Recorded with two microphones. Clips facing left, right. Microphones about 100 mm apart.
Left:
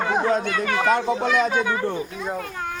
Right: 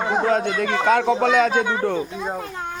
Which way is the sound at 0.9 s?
90° right.